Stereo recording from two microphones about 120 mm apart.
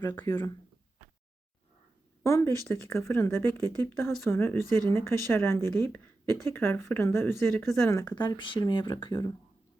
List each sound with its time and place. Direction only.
0.2 s speech: 20° left (ahead or behind)
2.2 s speech: 20° left (ahead or behind)
7.5 s speech: centre (ahead or behind)
7.8 s speech: 25° left (ahead or behind)
8.1 s speech: 40° left (ahead or behind)